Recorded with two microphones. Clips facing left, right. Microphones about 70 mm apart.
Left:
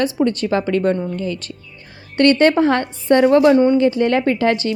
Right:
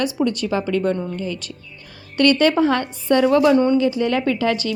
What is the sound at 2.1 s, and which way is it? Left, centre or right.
Speech, left.